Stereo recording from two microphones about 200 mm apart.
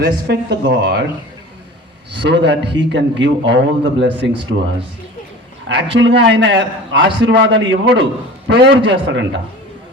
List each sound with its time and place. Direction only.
0.0 s a man's voice: 55° right (ahead or behind)
2.1 s a man's voice: 60° right (ahead or behind)
5.6 s a man's voice: 65° right (ahead or behind)